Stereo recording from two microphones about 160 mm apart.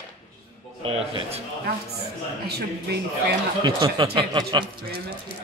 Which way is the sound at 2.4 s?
85° right.